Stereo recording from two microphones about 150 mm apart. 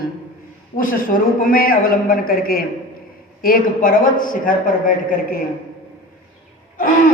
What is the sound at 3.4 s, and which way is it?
A man's voice, 70° left (ahead or behind).